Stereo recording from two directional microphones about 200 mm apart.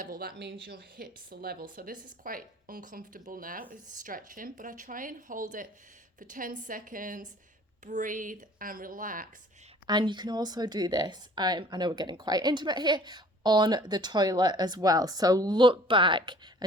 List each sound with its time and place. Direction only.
0.0 s a woman's voice: 45° right (ahead or behind)
9.8 s speech: 20° right (ahead or behind)